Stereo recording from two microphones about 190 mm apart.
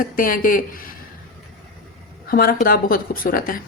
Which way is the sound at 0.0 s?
45° left (ahead or behind).